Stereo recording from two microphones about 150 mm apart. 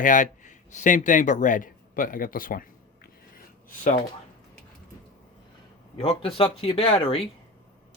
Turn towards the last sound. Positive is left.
turn(degrees=35)  # may be behind; listen again after turning